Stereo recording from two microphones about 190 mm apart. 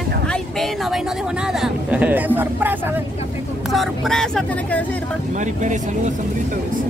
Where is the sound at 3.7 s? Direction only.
Centre (ahead or behind).